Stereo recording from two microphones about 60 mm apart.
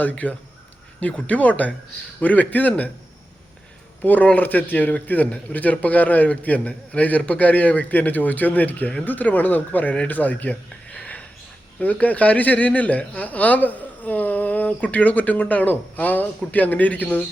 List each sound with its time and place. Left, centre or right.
0.0 s a man's voice: left
4.0 s a man's voice: left